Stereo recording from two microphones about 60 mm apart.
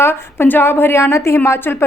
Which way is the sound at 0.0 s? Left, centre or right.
Left.